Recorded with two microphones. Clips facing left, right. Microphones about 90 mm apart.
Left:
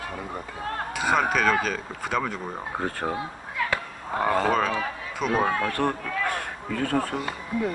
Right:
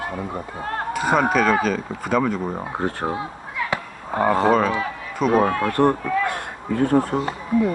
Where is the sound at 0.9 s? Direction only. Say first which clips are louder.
Right 4 dB; 40° right (ahead or behind).